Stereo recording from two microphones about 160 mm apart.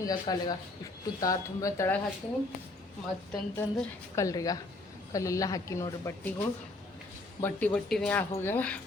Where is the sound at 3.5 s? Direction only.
15° left (ahead or behind).